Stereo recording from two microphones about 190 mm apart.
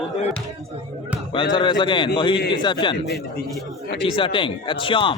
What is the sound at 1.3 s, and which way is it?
A man's voice, 25° left (ahead or behind).